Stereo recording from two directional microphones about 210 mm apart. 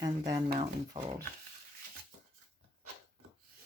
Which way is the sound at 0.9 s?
20° right (ahead or behind).